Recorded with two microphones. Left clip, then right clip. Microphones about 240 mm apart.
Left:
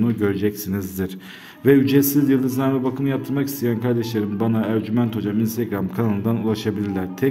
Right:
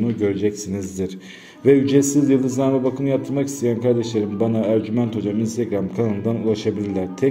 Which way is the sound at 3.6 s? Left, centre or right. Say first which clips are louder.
Right 6 dB; left.